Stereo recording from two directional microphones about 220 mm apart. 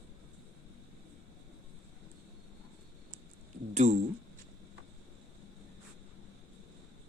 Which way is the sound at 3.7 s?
30° right (ahead or behind).